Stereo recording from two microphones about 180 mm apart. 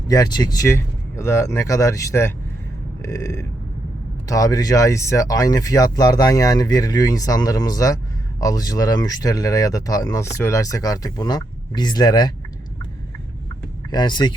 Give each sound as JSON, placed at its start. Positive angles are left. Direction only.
{"t": 0.1, "sound": "speech", "side_deg": 20}
{"t": 3.0, "sound": "a sound", "side_deg": 15}
{"t": 4.3, "sound": "speech", "side_deg": 20}
{"t": 13.9, "sound": "speech", "side_deg": 25}